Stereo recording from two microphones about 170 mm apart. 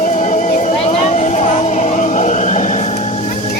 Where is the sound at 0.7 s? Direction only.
35° left (ahead or behind).